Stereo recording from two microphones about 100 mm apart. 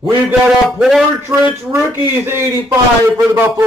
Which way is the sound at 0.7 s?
5° right (ahead or behind).